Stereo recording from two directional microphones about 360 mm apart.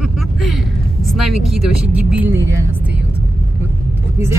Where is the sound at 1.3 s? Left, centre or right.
Left.